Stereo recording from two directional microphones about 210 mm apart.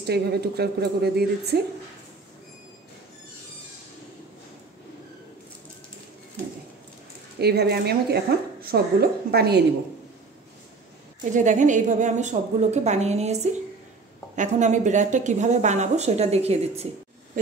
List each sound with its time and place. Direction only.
0.0 s a woman's voice: 50° right (ahead or behind)
7.3 s a woman's voice: 50° right (ahead or behind)
11.3 s speech: 35° right (ahead or behind)